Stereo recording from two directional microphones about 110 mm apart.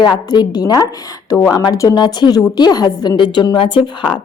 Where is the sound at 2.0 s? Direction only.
40° left (ahead or behind).